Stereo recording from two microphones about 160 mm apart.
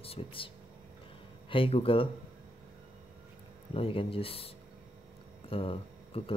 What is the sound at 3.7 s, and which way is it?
Speech, 35° left (ahead or behind).